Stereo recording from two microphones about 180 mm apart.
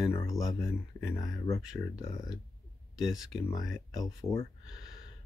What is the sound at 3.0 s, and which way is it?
Speech, centre (ahead or behind).